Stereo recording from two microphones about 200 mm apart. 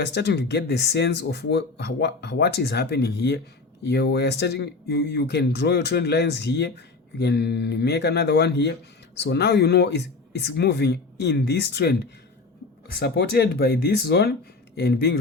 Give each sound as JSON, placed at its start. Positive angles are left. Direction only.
{"t": 0.0, "sound": "speech", "side_deg": 60}